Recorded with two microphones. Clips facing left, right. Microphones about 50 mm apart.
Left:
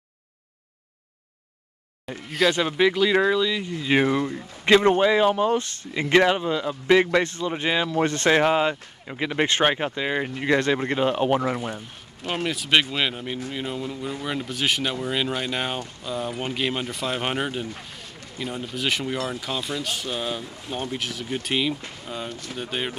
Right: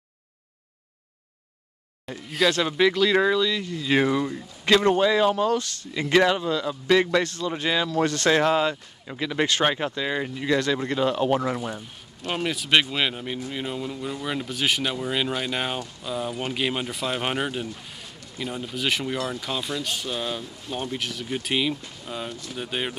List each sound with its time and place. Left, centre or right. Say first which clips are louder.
2.5 s speech: even; centre
12.3 s speech: even; centre
22.3 s speech: left 1 dB; left
22.6 s speech: even; centre